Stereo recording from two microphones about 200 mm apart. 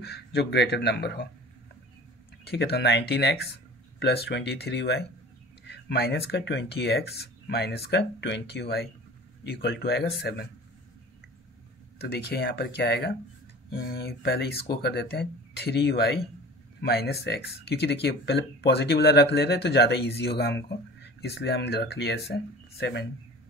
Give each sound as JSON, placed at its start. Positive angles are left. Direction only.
{"t": 0.0, "sound": "speech", "side_deg": 55}
{"t": 2.4, "sound": "speech", "side_deg": 50}
{"t": 12.0, "sound": "speech", "side_deg": 55}